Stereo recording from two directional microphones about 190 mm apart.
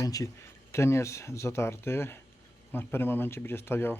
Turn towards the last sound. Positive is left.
turn(degrees=10)  # may be behind; listen again after turning